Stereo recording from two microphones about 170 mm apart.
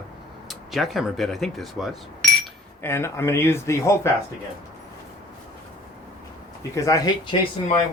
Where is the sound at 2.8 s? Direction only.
15° left (ahead or behind).